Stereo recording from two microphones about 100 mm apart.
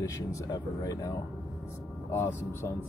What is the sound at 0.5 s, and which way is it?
Speech, 35° left (ahead or behind).